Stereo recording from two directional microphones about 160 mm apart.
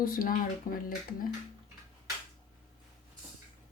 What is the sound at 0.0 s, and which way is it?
Speech, 65° left (ahead or behind).